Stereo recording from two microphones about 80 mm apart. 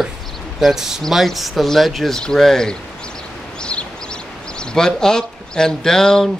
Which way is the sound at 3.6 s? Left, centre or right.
Centre.